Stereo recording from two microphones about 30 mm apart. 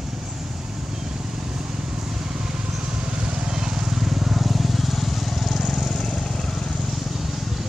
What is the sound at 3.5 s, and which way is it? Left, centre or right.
Vehicle, right.